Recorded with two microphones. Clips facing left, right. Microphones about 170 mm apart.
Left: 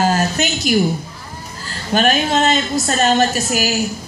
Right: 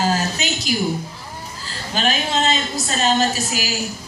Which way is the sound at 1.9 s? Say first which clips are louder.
Left 6 dB; 55° left (ahead or behind).